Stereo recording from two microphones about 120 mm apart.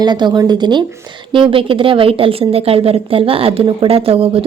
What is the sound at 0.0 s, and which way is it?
Speech, 40° right (ahead or behind).